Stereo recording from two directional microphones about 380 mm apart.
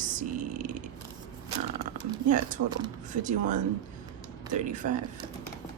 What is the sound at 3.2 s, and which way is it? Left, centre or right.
Speech, centre.